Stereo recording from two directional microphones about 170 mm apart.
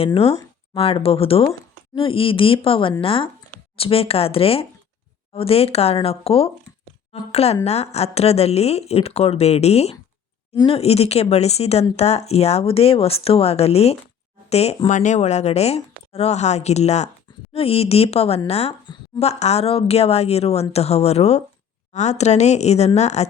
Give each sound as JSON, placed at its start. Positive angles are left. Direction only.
{"t": 0.0, "sound": "speech", "side_deg": 35}